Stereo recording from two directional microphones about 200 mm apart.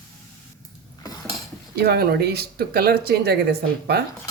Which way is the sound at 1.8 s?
50° right (ahead or behind).